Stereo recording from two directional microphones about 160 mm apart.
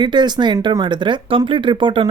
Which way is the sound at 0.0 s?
30° right (ahead or behind).